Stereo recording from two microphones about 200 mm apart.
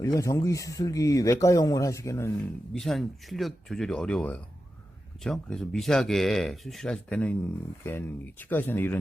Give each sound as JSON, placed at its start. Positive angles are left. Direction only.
{"t": 0.0, "sound": "speech", "side_deg": 15}
{"t": 2.7, "sound": "speech", "side_deg": 0}